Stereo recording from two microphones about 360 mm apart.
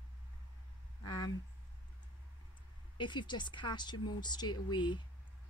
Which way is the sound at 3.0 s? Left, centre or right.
Centre.